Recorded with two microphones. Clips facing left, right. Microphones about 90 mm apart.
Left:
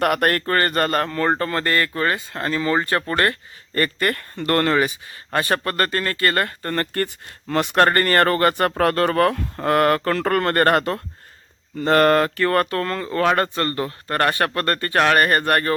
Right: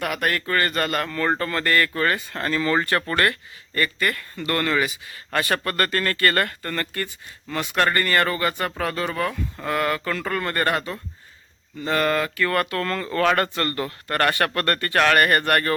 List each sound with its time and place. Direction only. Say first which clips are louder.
0.0 s speech: left 6 dB; 55° left (ahead or behind); by 3.3 s 30° left (ahead or behind)
3.8 s speech: left 3 dB; 45° left (ahead or behind); by 15.7 s 25° left (ahead or behind)